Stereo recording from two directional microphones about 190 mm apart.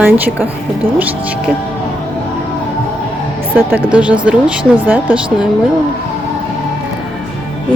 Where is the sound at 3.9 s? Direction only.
5° right (ahead or behind).